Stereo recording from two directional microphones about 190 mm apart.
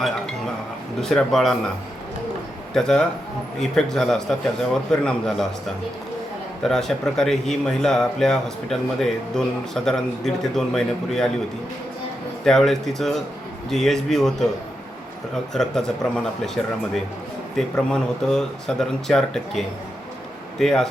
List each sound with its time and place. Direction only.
1.0 s speech: centre (ahead or behind)
2.7 s speech: centre (ahead or behind)
6.6 s speech: centre (ahead or behind)
12.5 s speech: centre (ahead or behind)
15.5 s speech: 5° left (ahead or behind)